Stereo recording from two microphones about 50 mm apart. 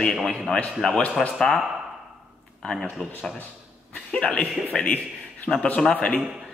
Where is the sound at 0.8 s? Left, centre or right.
Centre.